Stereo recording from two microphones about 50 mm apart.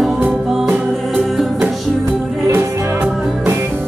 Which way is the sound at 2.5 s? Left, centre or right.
Right.